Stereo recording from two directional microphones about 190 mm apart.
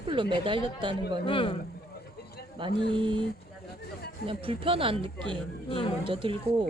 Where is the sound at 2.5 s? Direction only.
25° right (ahead or behind).